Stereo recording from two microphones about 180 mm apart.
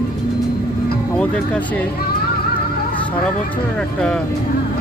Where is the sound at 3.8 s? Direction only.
5° left (ahead or behind).